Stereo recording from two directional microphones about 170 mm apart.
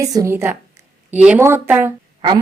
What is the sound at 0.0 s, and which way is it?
Speech, 20° right (ahead or behind).